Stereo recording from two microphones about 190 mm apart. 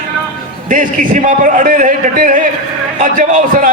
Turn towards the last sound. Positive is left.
turn(degrees=-45)  # may be behind; listen again after turning